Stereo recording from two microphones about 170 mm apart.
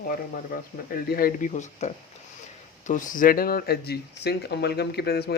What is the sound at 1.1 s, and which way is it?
Speech, 55° left (ahead or behind).